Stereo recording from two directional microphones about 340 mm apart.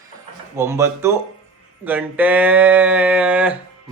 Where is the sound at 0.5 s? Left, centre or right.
Centre.